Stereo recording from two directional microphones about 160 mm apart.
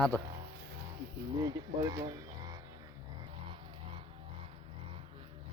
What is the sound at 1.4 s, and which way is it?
Speech, 25° right (ahead or behind).